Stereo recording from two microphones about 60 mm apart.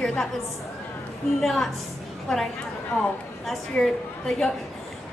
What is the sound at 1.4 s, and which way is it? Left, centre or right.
Speech, centre.